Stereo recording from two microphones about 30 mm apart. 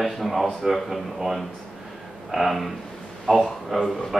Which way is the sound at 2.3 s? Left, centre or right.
Centre.